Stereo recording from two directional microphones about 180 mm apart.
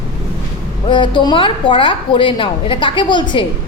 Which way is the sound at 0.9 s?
25° left (ahead or behind).